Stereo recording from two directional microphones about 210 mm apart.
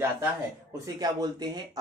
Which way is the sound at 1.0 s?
20° right (ahead or behind).